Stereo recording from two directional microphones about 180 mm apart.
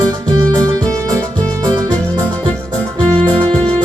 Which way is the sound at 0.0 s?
20° right (ahead or behind).